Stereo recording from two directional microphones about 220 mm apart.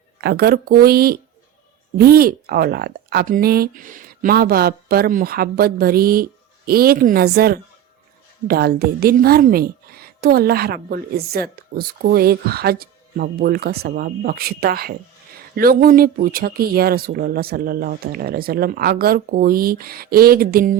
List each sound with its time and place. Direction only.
0.2 s speech: 45° right (ahead or behind)